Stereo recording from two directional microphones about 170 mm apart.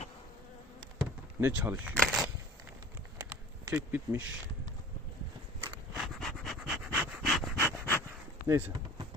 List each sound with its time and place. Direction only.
1.4 s speech: 10° right (ahead or behind)
2.0 s a sound: centre (ahead or behind)
3.2 s a sound: 15° right (ahead or behind)
3.9 s speech: 10° right (ahead or behind)
6.0 s dog: centre (ahead or behind)
7.6 s dog: 15° left (ahead or behind)
8.4 s speech: 10° right (ahead or behind)